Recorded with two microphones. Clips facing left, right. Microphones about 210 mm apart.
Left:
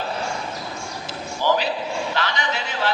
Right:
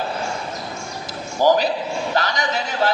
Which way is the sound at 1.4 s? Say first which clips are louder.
Right 5 dB; 40° right (ahead or behind).